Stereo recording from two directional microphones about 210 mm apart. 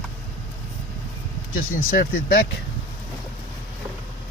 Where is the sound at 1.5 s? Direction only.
45° left (ahead or behind).